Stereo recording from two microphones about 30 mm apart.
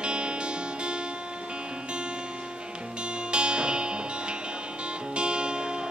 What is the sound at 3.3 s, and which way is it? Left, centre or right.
Music, right.